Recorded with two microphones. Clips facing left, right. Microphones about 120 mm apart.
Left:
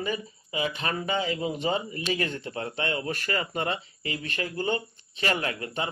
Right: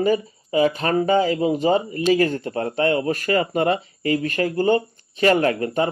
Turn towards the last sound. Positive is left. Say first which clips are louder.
# right 11 dB
turn(degrees=-40)  # may be behind; listen again after turning